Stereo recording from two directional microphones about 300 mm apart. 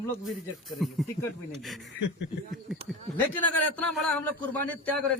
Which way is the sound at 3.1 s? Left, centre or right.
Centre.